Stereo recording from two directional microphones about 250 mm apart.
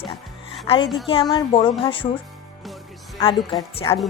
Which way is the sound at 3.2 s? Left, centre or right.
Centre.